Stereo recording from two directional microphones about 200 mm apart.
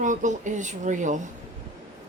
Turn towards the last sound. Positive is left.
turn(degrees=-40)  # may be behind; listen again after turning